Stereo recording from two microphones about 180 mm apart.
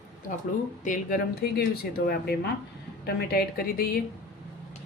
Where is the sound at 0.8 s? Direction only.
45° left (ahead or behind).